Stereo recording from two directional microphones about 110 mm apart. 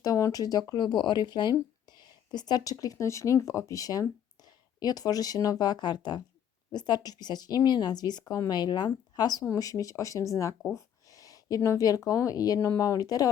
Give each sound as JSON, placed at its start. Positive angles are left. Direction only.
{"t": 0.0, "sound": "speech", "side_deg": 30}